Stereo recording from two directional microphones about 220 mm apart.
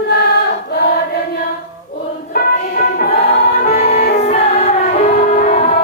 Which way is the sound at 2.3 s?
40° left (ahead or behind).